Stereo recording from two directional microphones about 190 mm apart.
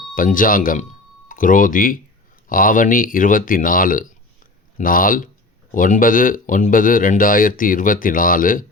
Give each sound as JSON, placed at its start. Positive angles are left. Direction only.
{"t": 0.1, "sound": "speech", "side_deg": 45}